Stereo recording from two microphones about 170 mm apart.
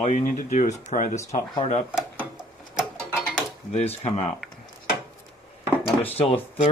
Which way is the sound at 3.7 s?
40° left (ahead or behind).